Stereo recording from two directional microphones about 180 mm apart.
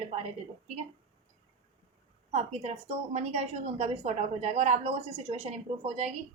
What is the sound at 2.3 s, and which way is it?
A woman's voice, 35° right (ahead or behind).